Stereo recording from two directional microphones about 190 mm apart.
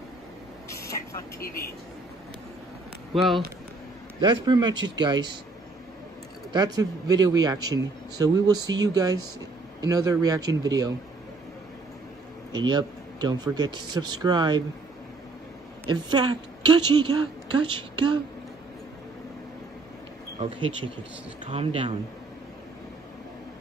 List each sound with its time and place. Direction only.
0.7 s vehicle: 15° left (ahead or behind)
3.2 s speech: centre (ahead or behind)
4.5 s a man's voice: 25° right (ahead or behind)
6.5 s a man's voice: 20° right (ahead or behind)
12.5 s a man's voice: 25° right (ahead or behind)
15.9 s a man's voice: 20° right (ahead or behind)
20.3 s a man's voice: 30° right (ahead or behind)